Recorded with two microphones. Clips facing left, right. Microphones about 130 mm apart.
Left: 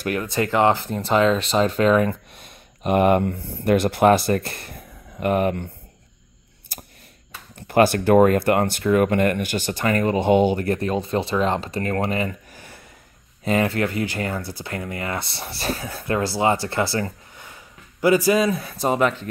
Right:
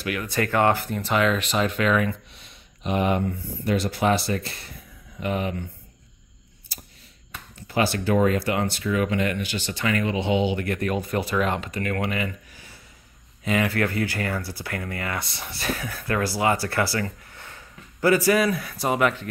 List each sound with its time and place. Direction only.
0.0 s speech: 40° left (ahead or behind)
0.3 s speech: 20° left (ahead or behind); by 2.1 s 35° left (ahead or behind)
2.3 s speech: 50° left (ahead or behind)
6.7 s a sound: 50° left (ahead or behind)
7.5 s speech: 55° left (ahead or behind); by 13.7 s 35° left (ahead or behind)
13.7 s speech: 20° left (ahead or behind)